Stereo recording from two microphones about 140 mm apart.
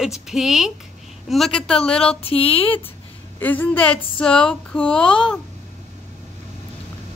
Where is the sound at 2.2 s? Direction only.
40° left (ahead or behind).